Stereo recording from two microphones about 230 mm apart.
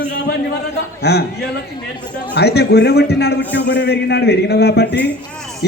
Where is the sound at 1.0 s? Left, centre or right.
Left.